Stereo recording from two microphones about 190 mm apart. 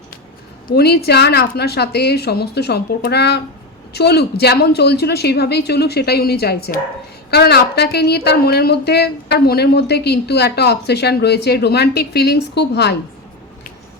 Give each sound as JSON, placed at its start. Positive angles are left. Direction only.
{"t": 0.7, "sound": "speech", "side_deg": 55}